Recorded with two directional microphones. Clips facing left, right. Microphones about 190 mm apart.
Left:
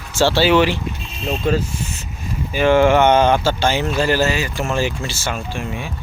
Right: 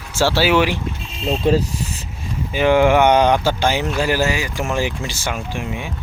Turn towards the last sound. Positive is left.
turn(degrees=-15)  # may be behind; listen again after turning